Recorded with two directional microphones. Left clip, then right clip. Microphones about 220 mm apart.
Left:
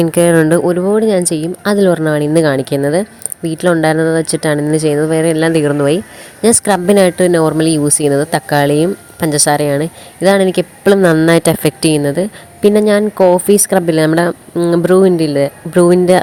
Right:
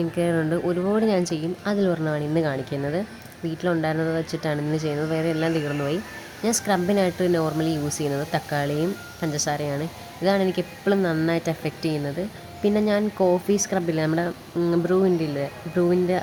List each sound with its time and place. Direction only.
0.0 s a woman's voice: 40° left (ahead or behind)